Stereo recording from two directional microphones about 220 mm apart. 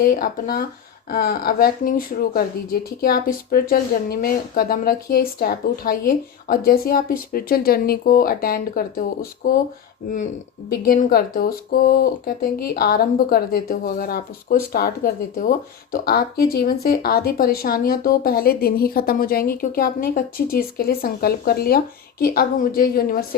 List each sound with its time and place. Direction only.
0.0 s a woman's voice: 40° left (ahead or behind)
10.7 s a woman's voice: 40° left (ahead or behind)